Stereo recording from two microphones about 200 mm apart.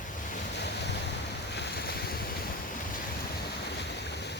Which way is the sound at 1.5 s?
50° left (ahead or behind).